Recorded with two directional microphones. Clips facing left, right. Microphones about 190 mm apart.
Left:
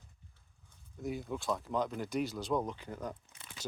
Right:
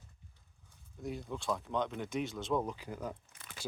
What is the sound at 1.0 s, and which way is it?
Speech, centre (ahead or behind).